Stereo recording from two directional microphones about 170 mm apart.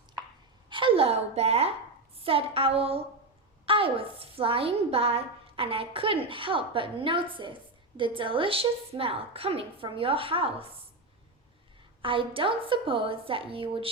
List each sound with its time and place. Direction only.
0.7 s a woman's voice: 30° right (ahead or behind)
12.0 s a woman's voice: 30° right (ahead or behind)